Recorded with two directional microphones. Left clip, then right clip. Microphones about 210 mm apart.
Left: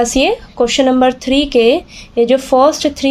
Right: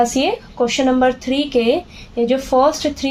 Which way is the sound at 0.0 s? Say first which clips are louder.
Left 4 dB; 45° left (ahead or behind).